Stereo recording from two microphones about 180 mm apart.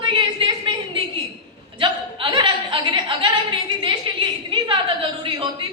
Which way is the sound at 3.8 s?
30° right (ahead or behind).